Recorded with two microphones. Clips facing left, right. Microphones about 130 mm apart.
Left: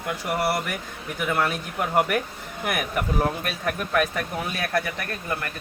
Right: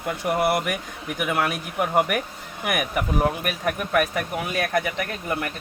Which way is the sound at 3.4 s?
5° right (ahead or behind).